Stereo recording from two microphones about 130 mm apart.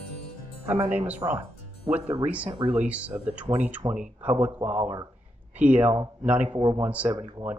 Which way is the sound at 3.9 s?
10° right (ahead or behind).